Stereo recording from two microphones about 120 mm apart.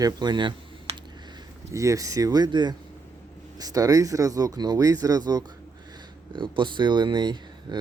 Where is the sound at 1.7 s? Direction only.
25° right (ahead or behind).